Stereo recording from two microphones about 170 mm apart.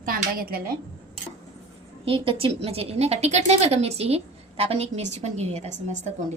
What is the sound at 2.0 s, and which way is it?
A woman's voice, 30° right (ahead or behind).